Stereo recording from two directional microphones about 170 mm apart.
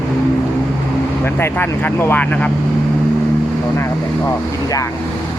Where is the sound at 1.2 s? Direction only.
15° left (ahead or behind).